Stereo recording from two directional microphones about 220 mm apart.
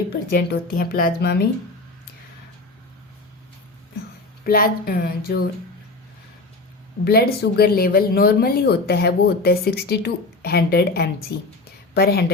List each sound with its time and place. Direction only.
0.3 s speech: 45° left (ahead or behind)
4.4 s speech: 40° left (ahead or behind)
7.0 s speech: 45° left (ahead or behind)